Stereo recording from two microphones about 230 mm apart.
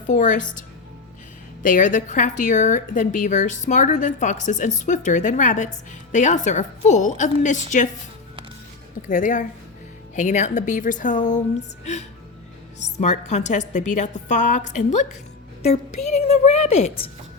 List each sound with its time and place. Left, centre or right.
0.1 s speech: left
1.6 s speech: left
9.0 s speech: left
13.0 s a woman's voice: left